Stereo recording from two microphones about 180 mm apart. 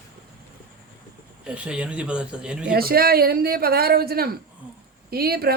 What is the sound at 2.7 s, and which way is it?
A man's voice, 55° right (ahead or behind).